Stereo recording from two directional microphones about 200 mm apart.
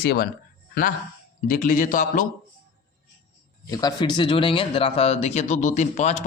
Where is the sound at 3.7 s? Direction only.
20° left (ahead or behind).